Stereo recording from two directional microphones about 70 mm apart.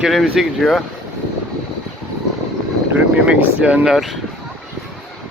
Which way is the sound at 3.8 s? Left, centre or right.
Centre.